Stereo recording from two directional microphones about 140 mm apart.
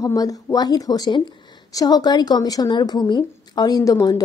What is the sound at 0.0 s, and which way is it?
A woman's voice, 25° left (ahead or behind).